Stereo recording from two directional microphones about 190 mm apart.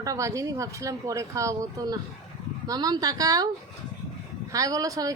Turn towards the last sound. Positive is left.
turn(degrees=-20)  # may be behind; listen again after turning